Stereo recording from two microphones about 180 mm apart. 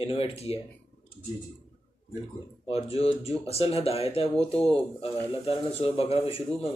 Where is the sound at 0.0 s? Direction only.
30° left (ahead or behind).